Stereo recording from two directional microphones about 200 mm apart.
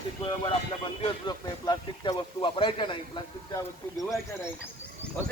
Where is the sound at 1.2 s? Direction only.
20° left (ahead or behind).